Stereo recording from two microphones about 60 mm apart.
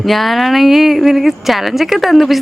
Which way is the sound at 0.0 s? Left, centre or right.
Centre.